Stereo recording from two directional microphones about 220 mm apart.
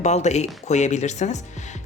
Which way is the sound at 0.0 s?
30° left (ahead or behind).